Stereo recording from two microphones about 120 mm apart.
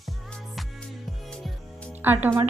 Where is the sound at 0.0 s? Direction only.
5° left (ahead or behind).